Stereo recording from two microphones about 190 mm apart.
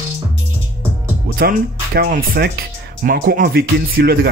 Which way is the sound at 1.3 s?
55° right (ahead or behind).